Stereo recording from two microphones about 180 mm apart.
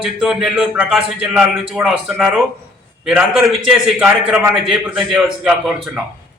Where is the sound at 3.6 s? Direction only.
5° right (ahead or behind).